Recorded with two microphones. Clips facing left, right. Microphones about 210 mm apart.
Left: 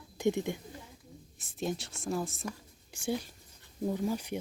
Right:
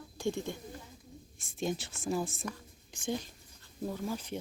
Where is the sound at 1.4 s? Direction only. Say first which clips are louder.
Even; centre (ahead or behind).